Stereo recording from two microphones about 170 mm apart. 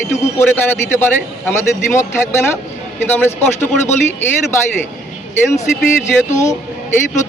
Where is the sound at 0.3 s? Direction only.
15° left (ahead or behind).